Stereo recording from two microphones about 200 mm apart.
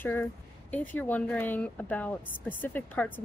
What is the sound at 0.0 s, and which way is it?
Speech, 10° left (ahead or behind).